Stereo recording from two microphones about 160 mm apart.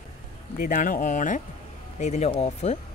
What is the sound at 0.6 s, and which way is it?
Speech, 60° left (ahead or behind).